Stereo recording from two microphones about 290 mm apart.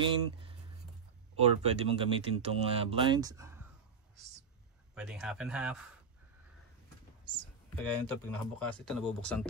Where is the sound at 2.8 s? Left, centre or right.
Centre.